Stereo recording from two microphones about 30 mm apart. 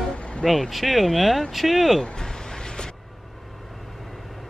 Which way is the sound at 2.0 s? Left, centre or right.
Left.